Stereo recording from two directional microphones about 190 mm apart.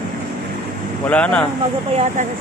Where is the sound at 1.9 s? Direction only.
35° right (ahead or behind).